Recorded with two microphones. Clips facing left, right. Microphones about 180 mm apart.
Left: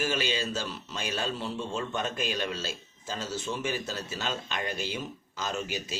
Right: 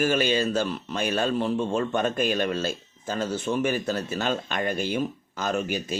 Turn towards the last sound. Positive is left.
turn(degrees=-55)  # may be behind; listen again after turning